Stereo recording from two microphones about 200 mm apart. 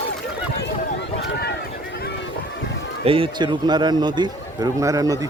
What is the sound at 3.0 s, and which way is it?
A man's voice, 25° right (ahead or behind).